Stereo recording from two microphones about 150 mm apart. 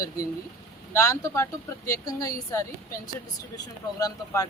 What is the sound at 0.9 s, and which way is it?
Speech, 20° left (ahead or behind).